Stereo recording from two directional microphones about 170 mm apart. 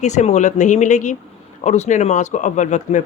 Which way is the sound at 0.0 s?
45° left (ahead or behind).